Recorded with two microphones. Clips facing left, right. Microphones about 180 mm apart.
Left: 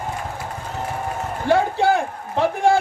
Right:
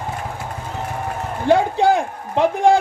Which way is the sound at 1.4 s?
15° right (ahead or behind).